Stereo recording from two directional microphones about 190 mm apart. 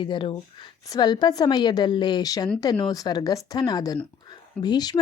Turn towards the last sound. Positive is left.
turn(degrees=20)  # may be behind; listen again after turning